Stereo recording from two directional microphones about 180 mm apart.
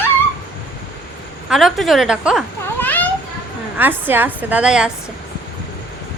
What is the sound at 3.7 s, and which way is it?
A woman's voice, 10° right (ahead or behind).